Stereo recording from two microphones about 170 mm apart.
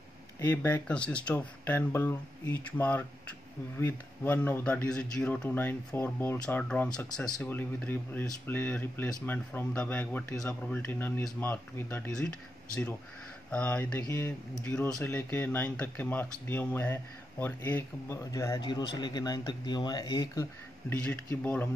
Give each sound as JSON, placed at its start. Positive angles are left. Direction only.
{"t": 0.4, "sound": "speech", "side_deg": 10}
{"t": 20.9, "sound": "speech", "side_deg": 10}